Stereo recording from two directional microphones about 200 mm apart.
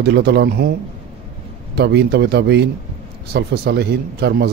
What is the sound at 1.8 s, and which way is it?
A man's voice, 55° right (ahead or behind).